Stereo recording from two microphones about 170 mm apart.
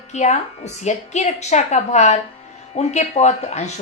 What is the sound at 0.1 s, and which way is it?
A woman's voice, 40° left (ahead or behind).